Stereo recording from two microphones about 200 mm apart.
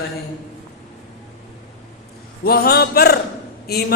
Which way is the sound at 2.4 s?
50° left (ahead or behind).